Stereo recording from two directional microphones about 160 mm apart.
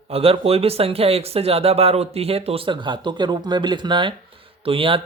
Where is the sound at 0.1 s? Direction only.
35° right (ahead or behind).